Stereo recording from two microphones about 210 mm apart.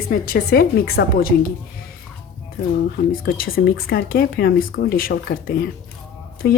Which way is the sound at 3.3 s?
45° left (ahead or behind).